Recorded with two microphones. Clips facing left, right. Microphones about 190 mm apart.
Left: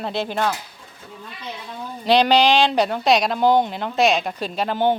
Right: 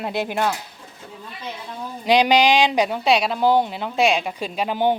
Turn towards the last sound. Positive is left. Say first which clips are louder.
# even
turn(degrees=-10)  # may be behind; listen again after turning